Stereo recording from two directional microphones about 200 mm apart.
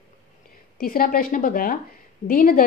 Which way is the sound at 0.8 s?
45° left (ahead or behind).